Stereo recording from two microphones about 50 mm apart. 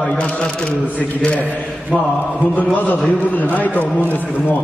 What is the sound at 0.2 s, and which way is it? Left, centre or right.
Speech, left.